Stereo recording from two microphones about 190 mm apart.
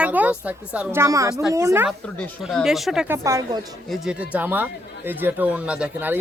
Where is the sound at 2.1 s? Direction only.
Centre (ahead or behind).